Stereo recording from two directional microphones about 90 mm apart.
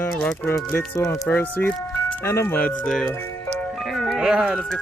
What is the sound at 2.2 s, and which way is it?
Speech, 30° left (ahead or behind).